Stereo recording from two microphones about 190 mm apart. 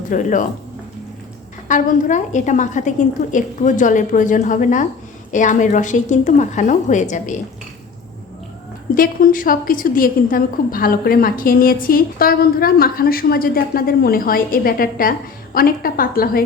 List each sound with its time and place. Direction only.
0.1 s a woman's voice: 45° left (ahead or behind)
1.6 s a woman's voice: 40° left (ahead or behind)
9.0 s a woman's voice: 45° left (ahead or behind)